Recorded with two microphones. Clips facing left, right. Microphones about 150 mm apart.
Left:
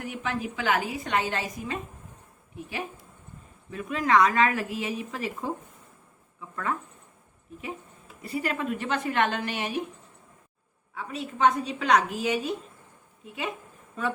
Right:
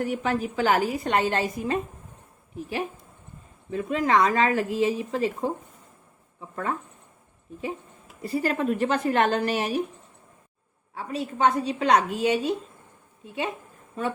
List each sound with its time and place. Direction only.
0.0 s a woman's voice: 40° right (ahead or behind)
3.7 s speech: 30° right (ahead or behind)
8.2 s a woman's voice: 35° right (ahead or behind)
10.9 s a woman's voice: 30° right (ahead or behind)